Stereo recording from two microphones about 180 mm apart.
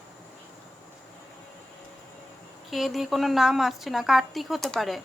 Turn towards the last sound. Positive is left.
turn(degrees=0)  # may be behind; listen again after turning